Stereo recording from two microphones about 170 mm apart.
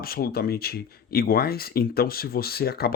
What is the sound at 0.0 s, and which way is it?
Speech, 65° left (ahead or behind).